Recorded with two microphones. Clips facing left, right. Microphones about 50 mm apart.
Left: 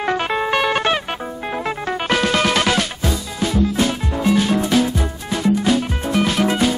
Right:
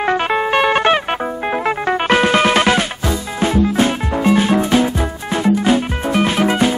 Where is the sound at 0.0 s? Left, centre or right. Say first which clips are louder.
Right 3 dB; centre.